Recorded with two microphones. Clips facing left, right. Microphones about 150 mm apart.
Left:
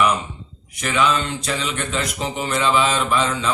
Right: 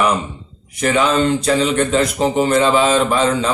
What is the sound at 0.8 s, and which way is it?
A man's voice, 35° right (ahead or behind).